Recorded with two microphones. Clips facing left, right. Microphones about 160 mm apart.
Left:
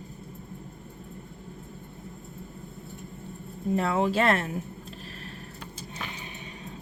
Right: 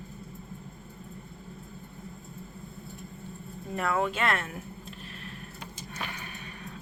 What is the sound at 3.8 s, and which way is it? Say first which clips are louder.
Speech: left 3 dB; 30° left (ahead or behind).